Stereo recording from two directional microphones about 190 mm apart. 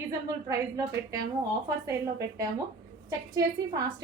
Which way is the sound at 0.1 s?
20° right (ahead or behind).